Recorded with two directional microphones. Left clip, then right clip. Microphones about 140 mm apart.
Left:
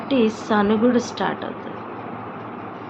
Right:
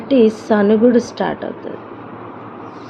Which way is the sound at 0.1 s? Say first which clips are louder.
Right 7 dB; 50° right (ahead or behind).